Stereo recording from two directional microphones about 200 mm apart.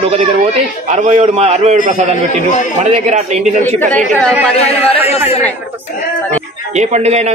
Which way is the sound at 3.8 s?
10° left (ahead or behind).